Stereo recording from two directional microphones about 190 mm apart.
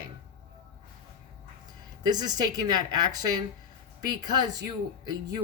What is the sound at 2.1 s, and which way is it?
Speech, 20° right (ahead or behind).